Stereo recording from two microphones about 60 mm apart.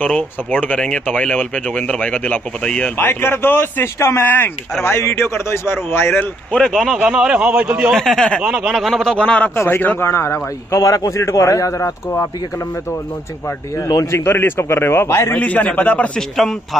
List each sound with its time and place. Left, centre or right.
0.5 s speech: left
3.0 s a man's voice: left
6.6 s speech: centre
7.1 s a man's voice: centre
7.9 s speech: centre
8.5 s speech: centre
9.1 s speech: centre
9.6 s a man's voice: left
13.7 s a man's voice: left
14.1 s a man's voice: left
15.3 s speech: left
16.2 s speech: centre